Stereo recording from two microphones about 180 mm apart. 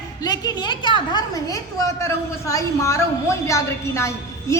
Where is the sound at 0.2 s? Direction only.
20° left (ahead or behind).